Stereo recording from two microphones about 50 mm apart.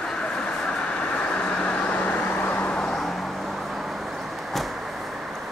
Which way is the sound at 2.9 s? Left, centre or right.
Centre.